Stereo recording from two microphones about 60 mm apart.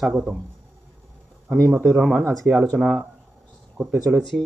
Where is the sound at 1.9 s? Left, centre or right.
Centre.